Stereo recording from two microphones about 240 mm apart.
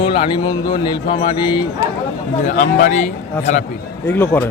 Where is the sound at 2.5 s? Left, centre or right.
Left.